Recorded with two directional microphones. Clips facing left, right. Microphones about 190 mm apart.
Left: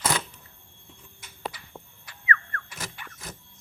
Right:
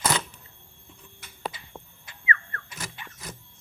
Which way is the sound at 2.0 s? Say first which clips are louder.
Left 1 dB; 25° right (ahead or behind).